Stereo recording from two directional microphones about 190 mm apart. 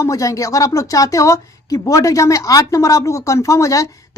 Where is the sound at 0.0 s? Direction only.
15° left (ahead or behind).